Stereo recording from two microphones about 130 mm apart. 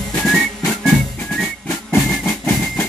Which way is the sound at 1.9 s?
15° left (ahead or behind).